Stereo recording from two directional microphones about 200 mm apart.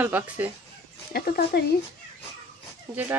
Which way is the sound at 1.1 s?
50° left (ahead or behind).